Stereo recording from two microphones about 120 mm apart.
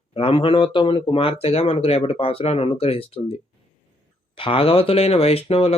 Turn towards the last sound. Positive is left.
turn(degrees=55)  # may be behind; listen again after turning